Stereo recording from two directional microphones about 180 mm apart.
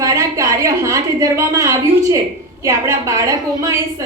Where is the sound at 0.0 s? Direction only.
15° right (ahead or behind).